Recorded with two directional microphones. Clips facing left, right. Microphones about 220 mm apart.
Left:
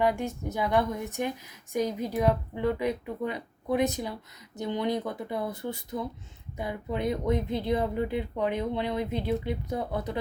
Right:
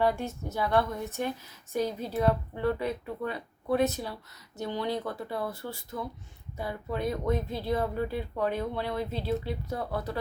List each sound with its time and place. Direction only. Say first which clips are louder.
0.0 s a woman's voice: left 1 dB; 15° left (ahead or behind)